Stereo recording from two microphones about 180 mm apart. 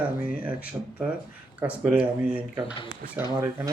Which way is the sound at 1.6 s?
5° right (ahead or behind).